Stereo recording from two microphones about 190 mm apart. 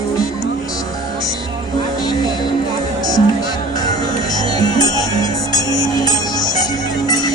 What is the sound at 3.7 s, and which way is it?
Music, 20° left (ahead or behind).